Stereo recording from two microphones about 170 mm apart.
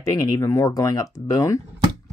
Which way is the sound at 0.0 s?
20° left (ahead or behind).